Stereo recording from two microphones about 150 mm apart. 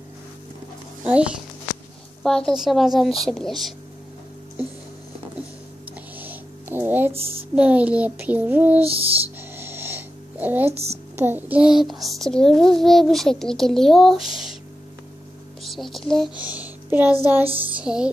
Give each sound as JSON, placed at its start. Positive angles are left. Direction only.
{"t": 1.0, "sound": "a child's voice", "side_deg": -10}
{"t": 2.2, "sound": "a child's voice", "side_deg": 5}
{"t": 6.1, "sound": "a sound", "side_deg": -15}
{"t": 7.5, "sound": "child singing", "side_deg": -10}
{"t": 8.8, "sound": "a child's voice", "side_deg": -40}
{"t": 9.6, "sound": "a sound", "side_deg": -15}
{"t": 10.7, "sound": "a woman's voice", "side_deg": -45}
{"t": 11.1, "sound": "a child's voice", "side_deg": -15}
{"t": 15.6, "sound": "speech", "side_deg": 0}
{"t": 16.3, "sound": "a child's voice", "side_deg": -10}